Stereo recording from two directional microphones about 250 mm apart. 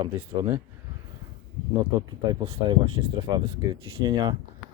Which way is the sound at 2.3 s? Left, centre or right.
Centre.